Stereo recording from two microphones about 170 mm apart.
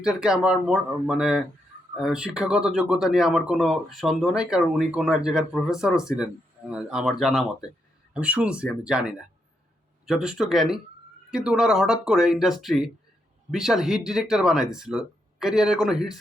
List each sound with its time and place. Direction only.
0.0 s speech: 5° right (ahead or behind)